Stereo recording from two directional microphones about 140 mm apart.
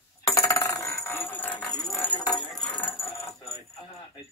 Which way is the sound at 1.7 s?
25° left (ahead or behind).